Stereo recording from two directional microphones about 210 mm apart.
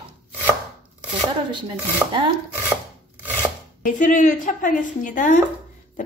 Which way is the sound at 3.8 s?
35° left (ahead or behind).